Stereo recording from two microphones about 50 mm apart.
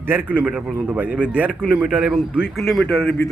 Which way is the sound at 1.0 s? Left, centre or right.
Right.